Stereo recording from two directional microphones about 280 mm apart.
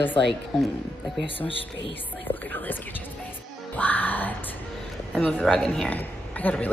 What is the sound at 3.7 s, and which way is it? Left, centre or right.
Music, centre.